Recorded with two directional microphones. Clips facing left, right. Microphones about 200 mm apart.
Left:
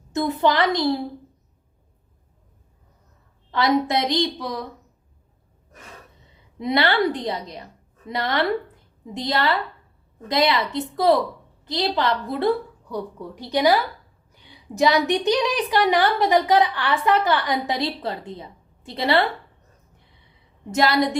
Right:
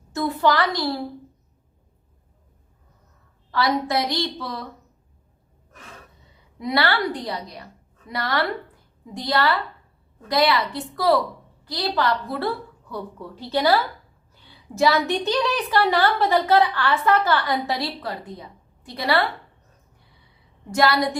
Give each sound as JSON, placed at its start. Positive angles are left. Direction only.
{"t": 0.1, "sound": "a woman's voice", "side_deg": 20}
{"t": 3.5, "sound": "a woman's voice", "side_deg": 20}
{"t": 6.6, "sound": "a woman's voice", "side_deg": 20}
{"t": 20.7, "sound": "a woman's voice", "side_deg": 20}